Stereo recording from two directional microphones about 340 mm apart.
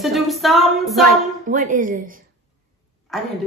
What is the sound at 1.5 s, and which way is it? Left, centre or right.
Speech, right.